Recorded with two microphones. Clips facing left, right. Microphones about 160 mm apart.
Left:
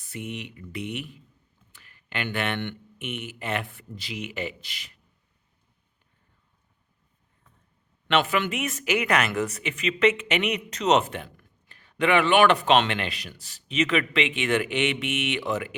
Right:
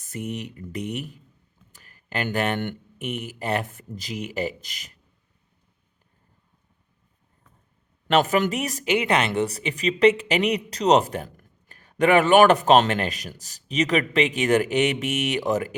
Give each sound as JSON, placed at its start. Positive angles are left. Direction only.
{"t": 0.0, "sound": "speech", "side_deg": -45}
{"t": 8.0, "sound": "speech", "side_deg": -40}